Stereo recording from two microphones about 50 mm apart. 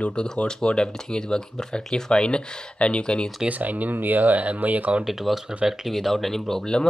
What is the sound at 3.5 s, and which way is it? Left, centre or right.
Speech, right.